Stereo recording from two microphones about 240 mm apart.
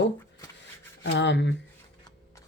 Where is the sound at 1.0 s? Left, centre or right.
Left.